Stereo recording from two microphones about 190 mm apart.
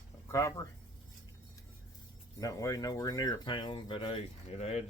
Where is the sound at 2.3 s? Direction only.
20° left (ahead or behind); by 4.8 s 35° left (ahead or behind).